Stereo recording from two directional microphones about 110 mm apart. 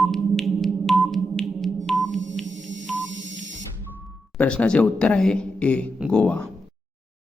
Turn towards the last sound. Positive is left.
turn(degrees=10)  # may be behind; listen again after turning